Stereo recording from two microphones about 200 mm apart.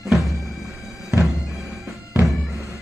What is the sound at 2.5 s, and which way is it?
Bagpipes, 15° left (ahead or behind).